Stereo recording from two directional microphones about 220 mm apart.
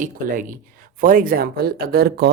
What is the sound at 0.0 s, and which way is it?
Speech, 40° right (ahead or behind).